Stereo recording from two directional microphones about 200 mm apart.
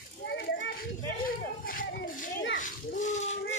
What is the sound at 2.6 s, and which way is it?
Splash, 40° left (ahead or behind).